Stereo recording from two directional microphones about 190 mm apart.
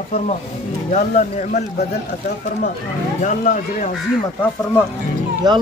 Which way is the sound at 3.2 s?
45° left (ahead or behind).